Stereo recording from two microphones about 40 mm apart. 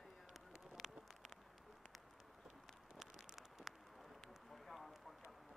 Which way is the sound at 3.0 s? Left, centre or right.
Centre.